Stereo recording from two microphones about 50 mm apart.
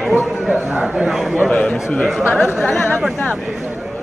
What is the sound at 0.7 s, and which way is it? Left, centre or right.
Speech, right.